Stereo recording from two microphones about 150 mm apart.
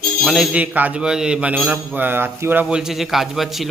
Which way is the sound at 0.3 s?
5° right (ahead or behind).